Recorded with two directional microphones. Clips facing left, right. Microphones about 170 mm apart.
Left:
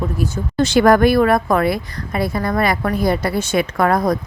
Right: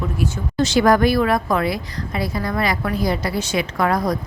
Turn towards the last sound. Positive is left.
turn(degrees=55)  # may be behind; listen again after turning